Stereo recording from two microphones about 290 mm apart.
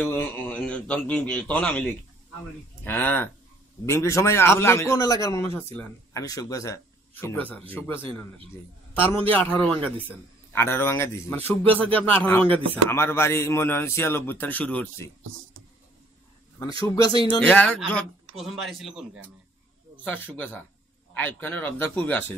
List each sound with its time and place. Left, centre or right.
0.0 s a man's voice: centre
16.8 s a man's voice: centre